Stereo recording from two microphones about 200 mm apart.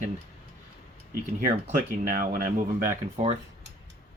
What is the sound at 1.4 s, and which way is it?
Speech, 40° right (ahead or behind).